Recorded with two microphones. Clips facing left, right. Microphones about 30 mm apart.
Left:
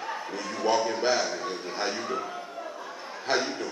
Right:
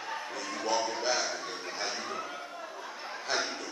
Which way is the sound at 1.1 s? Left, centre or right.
Centre.